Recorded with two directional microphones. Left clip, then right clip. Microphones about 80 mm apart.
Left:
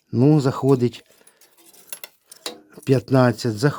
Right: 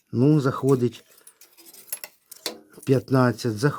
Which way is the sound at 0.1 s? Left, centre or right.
Centre.